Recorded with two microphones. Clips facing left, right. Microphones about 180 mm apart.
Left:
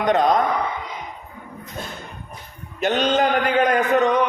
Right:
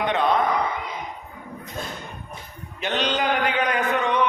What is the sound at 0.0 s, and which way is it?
Speech, 40° left (ahead or behind).